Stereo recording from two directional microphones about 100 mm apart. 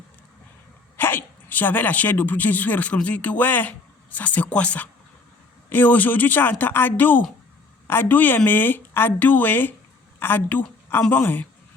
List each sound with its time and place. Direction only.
0.9 s a woman's voice: 20° left (ahead or behind)